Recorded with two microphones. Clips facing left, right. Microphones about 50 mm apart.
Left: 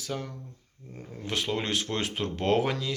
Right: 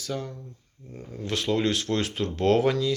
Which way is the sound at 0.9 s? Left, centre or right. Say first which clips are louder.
Right 2 dB; left.